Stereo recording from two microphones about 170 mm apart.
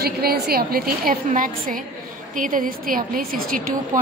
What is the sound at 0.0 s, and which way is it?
A woman's voice, 65° right (ahead or behind).